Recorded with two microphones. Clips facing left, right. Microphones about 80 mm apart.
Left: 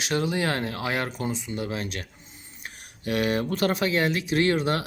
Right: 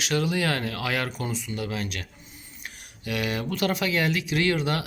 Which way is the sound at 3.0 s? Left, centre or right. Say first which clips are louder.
Left 4 dB; left.